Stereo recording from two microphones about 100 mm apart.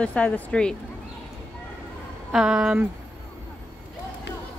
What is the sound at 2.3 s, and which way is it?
Speech, 5° right (ahead or behind).